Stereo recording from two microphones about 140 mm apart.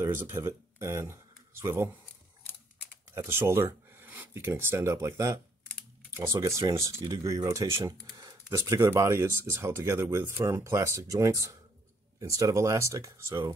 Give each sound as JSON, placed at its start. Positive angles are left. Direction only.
{"t": 0.0, "sound": "speech", "side_deg": -20}
{"t": 3.2, "sound": "speech", "side_deg": -15}